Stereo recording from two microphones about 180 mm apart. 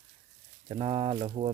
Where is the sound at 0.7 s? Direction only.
30° right (ahead or behind).